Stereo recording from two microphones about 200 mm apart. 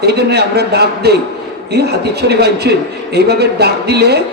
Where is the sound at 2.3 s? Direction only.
55° right (ahead or behind).